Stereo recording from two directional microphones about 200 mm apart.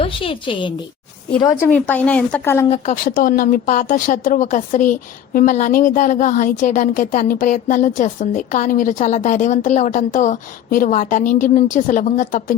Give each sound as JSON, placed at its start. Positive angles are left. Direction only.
{"t": 0.0, "sound": "a woman's voice", "side_deg": 25}
{"t": 1.6, "sound": "speech", "side_deg": 10}
{"t": 2.6, "sound": "speech", "side_deg": 35}